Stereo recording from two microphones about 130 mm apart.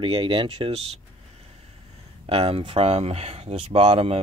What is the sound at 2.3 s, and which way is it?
Speech, 50° right (ahead or behind).